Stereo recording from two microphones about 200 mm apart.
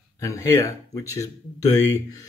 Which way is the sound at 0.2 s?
15° left (ahead or behind).